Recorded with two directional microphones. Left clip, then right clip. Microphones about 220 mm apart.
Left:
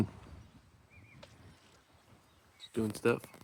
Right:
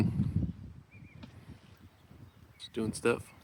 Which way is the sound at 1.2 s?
25° left (ahead or behind).